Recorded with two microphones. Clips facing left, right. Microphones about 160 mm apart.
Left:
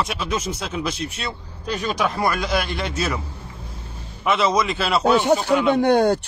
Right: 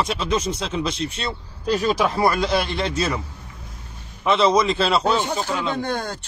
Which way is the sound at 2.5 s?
30° right (ahead or behind).